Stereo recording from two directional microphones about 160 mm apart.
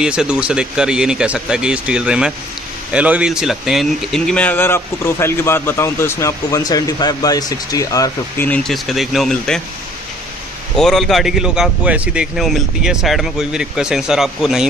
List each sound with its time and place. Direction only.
0.0 s a man's voice: 5° right (ahead or behind); by 8.5 s 20° left (ahead or behind)
8.5 s a man's voice: centre (ahead or behind)
10.8 s a man's voice: centre (ahead or behind)